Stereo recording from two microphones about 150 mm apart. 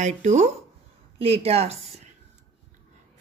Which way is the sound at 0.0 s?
50° right (ahead or behind).